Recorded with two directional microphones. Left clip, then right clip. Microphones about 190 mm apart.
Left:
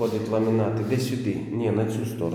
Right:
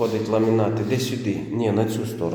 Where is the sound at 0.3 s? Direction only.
15° right (ahead or behind).